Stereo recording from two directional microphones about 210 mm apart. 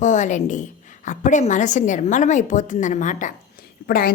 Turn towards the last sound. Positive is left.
turn(degrees=45)  # may be behind; listen again after turning